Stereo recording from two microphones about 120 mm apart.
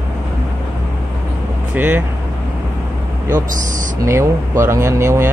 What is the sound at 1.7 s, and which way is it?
Vehicle, 15° right (ahead or behind).